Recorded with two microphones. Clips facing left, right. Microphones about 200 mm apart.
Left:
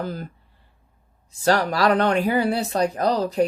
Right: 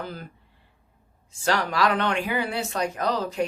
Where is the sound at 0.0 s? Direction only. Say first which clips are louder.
Left 6 dB; 40° left (ahead or behind).